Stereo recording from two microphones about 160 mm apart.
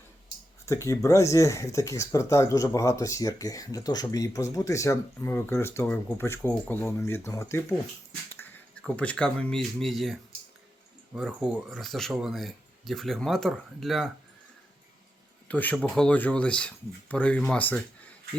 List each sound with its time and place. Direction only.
0.6 s speech: 20° left (ahead or behind)
8.8 s speech: 5° left (ahead or behind)
15.4 s speech: 10° left (ahead or behind)